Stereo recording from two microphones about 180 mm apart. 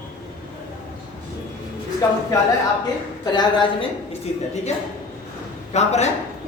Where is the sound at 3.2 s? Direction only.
25° left (ahead or behind).